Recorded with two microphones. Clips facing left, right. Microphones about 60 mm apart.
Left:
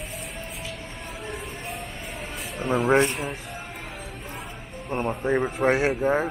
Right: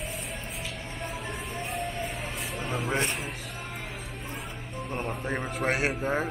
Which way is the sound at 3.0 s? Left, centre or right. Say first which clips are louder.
Left 4 dB; centre.